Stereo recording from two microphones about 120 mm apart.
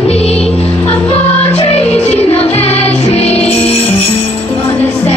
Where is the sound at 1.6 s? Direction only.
60° left (ahead or behind).